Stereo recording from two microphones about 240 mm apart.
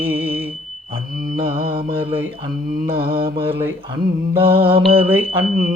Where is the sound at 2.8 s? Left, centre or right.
Right.